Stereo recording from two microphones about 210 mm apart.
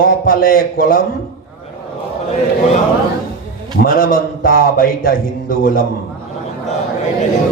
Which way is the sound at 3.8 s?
45° left (ahead or behind).